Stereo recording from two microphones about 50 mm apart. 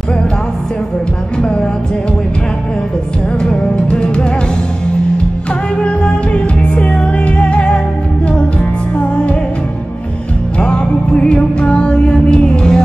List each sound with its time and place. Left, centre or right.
1.4 s music: centre
3.4 s music: centre
5.8 s music: left
10.6 s music: left